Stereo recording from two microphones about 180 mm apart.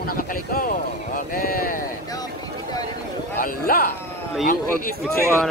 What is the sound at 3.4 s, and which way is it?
Speech, 55° left (ahead or behind).